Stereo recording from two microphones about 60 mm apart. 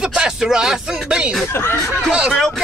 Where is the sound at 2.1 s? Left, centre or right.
Centre.